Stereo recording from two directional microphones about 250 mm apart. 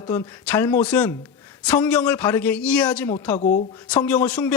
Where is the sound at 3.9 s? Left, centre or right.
Centre.